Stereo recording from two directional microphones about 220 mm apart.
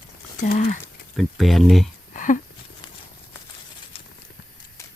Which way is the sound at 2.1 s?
35° left (ahead or behind).